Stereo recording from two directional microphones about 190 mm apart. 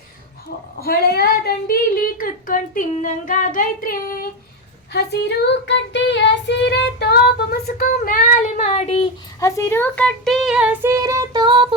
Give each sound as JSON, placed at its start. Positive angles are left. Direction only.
{"t": 0.8, "sound": "speech", "side_deg": 55}
{"t": 5.5, "sound": "child singing", "side_deg": 70}
{"t": 9.4, "sound": "speech", "side_deg": 15}